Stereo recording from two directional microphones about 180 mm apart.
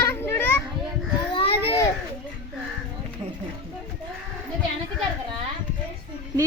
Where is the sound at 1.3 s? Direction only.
30° left (ahead or behind).